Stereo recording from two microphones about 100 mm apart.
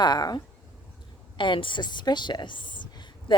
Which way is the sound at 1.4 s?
55° left (ahead or behind).